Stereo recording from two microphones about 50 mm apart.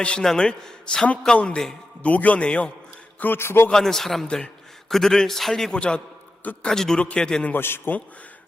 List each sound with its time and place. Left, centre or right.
0.2 s a man's voice: centre
2.0 s a man's voice: left
3.2 s a man's voice: left
3.4 s a man's voice: left
3.7 s a man's voice: centre
5.7 s a man's voice: centre
7.5 s a man's voice: left